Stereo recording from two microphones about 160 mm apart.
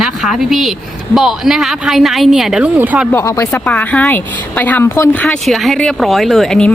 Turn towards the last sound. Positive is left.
turn(degrees=5)  # may be behind; listen again after turning